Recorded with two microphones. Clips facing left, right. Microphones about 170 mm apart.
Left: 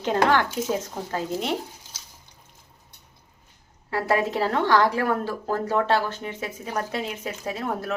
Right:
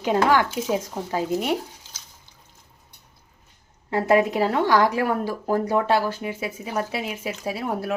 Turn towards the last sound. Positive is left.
turn(degrees=-10)  # may be behind; listen again after turning